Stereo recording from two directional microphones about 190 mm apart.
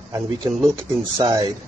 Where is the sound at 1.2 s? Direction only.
20° right (ahead or behind).